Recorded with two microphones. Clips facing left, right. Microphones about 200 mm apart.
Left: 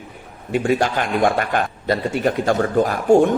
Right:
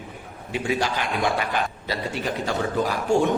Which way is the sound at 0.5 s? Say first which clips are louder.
Left 6 dB; 50° left (ahead or behind).